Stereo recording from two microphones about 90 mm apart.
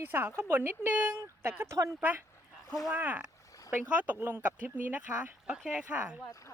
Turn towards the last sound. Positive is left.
turn(degrees=-10)  # may be behind; listen again after turning